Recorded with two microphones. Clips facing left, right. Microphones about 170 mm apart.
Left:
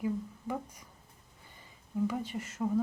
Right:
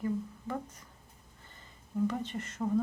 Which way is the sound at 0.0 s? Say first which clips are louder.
Even; 10° left (ahead or behind).